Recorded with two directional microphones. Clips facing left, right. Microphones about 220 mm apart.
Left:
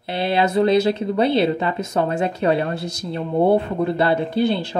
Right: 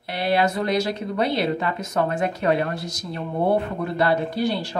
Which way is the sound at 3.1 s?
25° left (ahead or behind).